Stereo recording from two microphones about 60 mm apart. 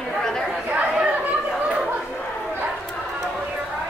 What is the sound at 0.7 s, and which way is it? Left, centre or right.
Chatter, centre.